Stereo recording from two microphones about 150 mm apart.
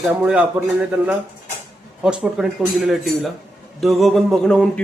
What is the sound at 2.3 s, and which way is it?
A man's voice, 5° right (ahead or behind).